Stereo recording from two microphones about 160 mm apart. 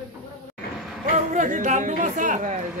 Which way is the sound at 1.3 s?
50° right (ahead or behind).